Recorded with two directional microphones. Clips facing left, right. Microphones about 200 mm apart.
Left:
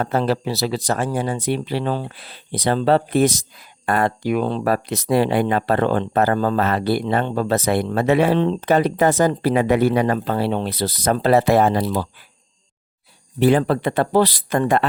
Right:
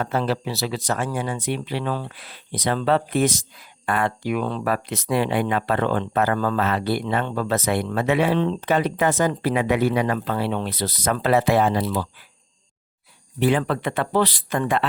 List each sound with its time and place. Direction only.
0.0 s speech: 40° left (ahead or behind)
13.4 s speech: 35° left (ahead or behind)